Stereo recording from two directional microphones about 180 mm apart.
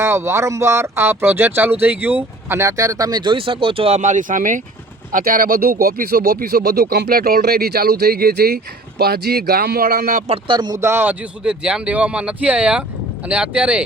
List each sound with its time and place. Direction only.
0.0 s speech: 15° right (ahead or behind); by 10.3 s 50° right (ahead or behind)
10.3 s speech: 25° right (ahead or behind); by 13.8 s 5° right (ahead or behind)